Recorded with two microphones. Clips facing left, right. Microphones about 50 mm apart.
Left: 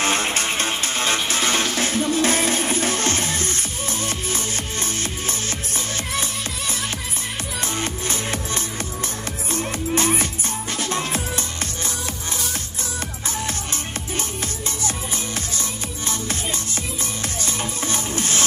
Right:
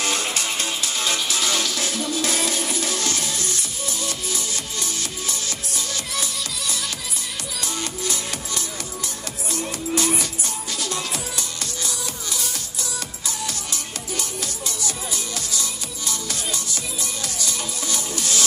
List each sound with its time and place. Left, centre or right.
0.0 s music: left
7.6 s music: left
17.4 s music: left